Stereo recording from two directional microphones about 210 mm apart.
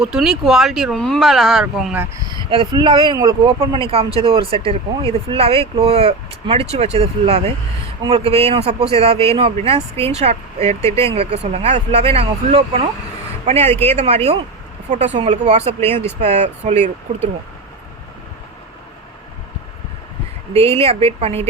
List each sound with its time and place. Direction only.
0.0 s speech: centre (ahead or behind); by 17.2 s 30° right (ahead or behind)
20.5 s speech: 30° right (ahead or behind)